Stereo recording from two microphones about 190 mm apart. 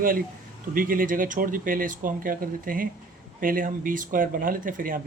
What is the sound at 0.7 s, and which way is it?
Speech, 45° right (ahead or behind).